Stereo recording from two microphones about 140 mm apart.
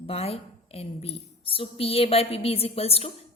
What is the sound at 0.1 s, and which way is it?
A woman's voice, 45° left (ahead or behind).